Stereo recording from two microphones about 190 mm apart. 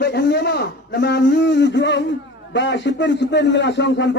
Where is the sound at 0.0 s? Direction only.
65° left (ahead or behind).